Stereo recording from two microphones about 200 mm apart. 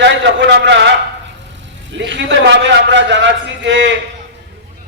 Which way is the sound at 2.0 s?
60° right (ahead or behind).